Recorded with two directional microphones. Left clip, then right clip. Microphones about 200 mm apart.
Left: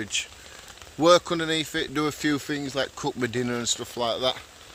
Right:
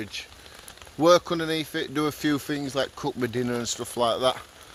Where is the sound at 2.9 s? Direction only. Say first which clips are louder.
Even; 5° right (ahead or behind).